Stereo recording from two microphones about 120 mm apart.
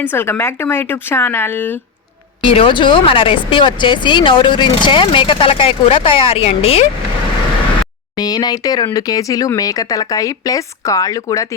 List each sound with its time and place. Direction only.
0.0 s speech: 20° left (ahead or behind)
2.4 s speech: 45° left (ahead or behind)
8.1 s speech: 35° left (ahead or behind)